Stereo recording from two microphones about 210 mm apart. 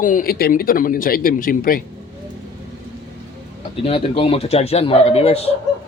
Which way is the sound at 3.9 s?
25° left (ahead or behind).